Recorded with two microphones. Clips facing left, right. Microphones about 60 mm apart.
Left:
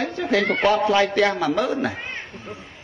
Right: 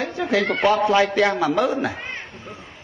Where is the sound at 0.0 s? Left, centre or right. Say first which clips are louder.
Even; centre.